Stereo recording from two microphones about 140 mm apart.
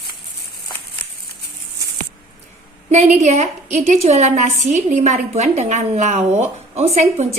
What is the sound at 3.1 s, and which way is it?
A woman's voice, 55° right (ahead or behind).